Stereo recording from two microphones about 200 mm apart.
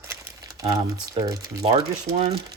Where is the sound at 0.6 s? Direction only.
15° right (ahead or behind).